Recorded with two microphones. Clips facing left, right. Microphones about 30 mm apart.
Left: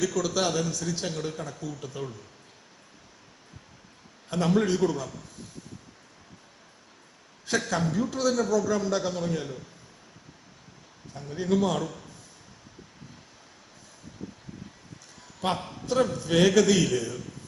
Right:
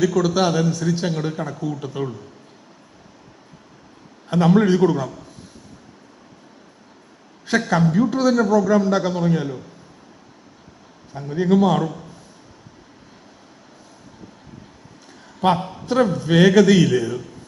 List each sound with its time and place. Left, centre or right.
0.0 s a man's voice: right
4.3 s a man's voice: right
7.4 s a man's voice: right
11.1 s a man's voice: right
15.6 s a man's voice: right